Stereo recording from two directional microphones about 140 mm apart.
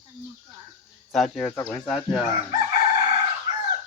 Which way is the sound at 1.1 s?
Centre (ahead or behind).